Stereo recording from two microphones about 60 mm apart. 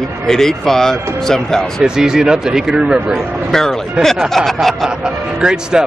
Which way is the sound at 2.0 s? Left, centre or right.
Centre.